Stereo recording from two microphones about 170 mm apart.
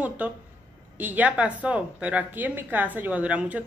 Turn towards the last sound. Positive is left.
turn(degrees=-10)  # may be behind; listen again after turning